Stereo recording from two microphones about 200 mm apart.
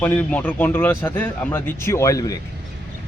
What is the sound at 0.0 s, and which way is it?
Speech, 10° left (ahead or behind).